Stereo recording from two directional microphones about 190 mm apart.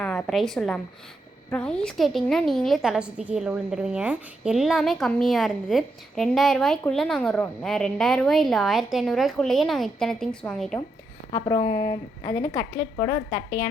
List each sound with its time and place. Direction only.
0.0 s a woman's voice: 5° left (ahead or behind)
11.3 s a woman's voice: 20° left (ahead or behind)